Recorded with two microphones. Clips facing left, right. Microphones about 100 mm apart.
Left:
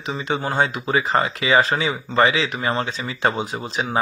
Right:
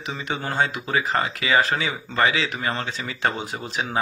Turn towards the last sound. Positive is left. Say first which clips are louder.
# left 3 dB
turn(degrees=20)  # may be behind; listen again after turning